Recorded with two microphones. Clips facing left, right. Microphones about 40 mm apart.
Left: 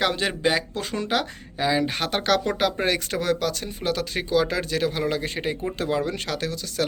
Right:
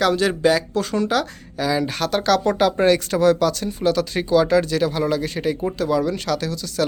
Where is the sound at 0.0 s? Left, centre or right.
Left.